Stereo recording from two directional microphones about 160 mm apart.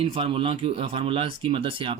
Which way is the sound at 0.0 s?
35° right (ahead or behind).